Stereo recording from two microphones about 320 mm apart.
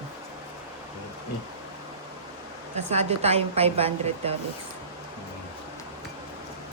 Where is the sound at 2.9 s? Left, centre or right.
Centre.